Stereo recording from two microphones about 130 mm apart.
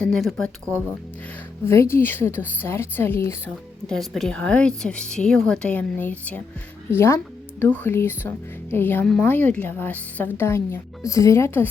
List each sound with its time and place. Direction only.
0.0 s speech: 5° left (ahead or behind)
1.6 s a woman's voice: 20° left (ahead or behind)
3.8 s a woman's voice: 5° left (ahead or behind); by 11.7 s 20° left (ahead or behind)